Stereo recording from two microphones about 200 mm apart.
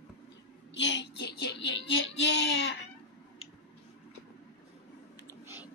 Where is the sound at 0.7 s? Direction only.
65° left (ahead or behind).